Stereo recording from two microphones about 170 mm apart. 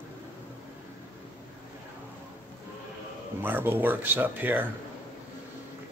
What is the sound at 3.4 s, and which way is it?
A man's voice, 10° right (ahead or behind).